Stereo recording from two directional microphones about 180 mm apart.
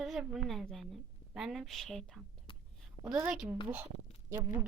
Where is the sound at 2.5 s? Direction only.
30° left (ahead or behind).